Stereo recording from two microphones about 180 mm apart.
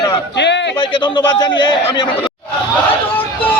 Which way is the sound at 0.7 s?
25° left (ahead or behind).